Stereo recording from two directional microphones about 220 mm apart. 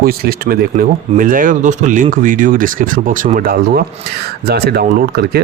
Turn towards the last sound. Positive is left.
turn(degrees=-45)  # may be behind; listen again after turning